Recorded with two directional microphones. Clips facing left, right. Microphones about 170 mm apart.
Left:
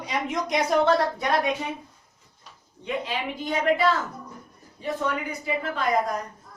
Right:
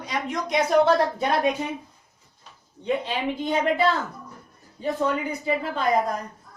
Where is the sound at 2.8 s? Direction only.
30° right (ahead or behind).